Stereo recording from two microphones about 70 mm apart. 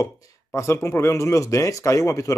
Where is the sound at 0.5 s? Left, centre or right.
Left.